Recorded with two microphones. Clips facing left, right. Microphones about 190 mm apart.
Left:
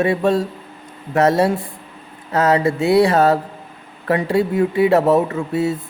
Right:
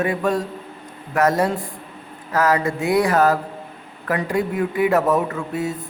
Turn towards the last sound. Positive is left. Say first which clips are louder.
# left 5 dB
turn(degrees=25)  # may be behind; listen again after turning